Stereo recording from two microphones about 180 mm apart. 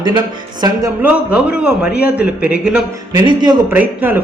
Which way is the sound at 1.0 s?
10° right (ahead or behind).